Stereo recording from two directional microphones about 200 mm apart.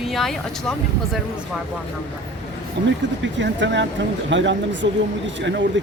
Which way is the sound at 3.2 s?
65° right (ahead or behind).